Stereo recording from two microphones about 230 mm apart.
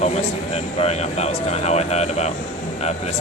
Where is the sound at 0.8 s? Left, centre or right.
Left.